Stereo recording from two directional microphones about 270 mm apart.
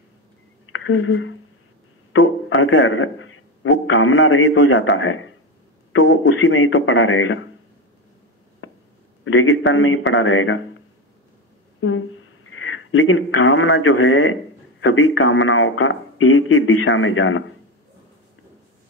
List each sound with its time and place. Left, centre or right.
0.7 s a woman's voice: left
9.2 s speech: left
11.8 s speech: left